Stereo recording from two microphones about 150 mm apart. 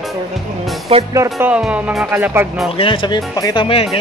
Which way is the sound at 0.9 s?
40° right (ahead or behind).